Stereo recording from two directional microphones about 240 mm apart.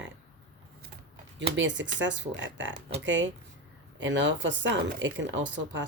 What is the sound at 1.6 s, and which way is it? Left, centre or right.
Speech, right.